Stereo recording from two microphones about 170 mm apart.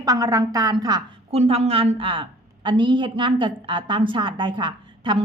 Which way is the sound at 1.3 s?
40° right (ahead or behind).